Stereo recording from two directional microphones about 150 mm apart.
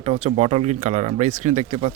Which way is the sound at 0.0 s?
40° right (ahead or behind).